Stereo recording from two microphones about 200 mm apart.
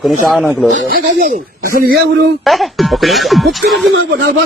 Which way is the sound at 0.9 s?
45° right (ahead or behind).